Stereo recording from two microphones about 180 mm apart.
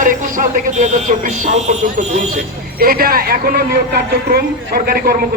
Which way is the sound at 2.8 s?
55° right (ahead or behind).